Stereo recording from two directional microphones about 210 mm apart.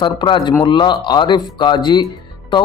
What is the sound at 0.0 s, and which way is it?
A man's voice, 25° left (ahead or behind).